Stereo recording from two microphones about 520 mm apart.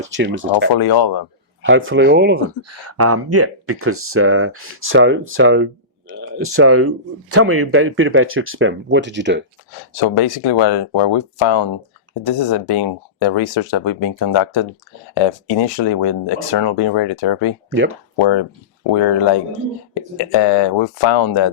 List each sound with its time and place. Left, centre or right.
0.1 s speech: right
0.7 s speech: left
1.6 s speech: right
9.9 s speech: left
18.8 s speech: left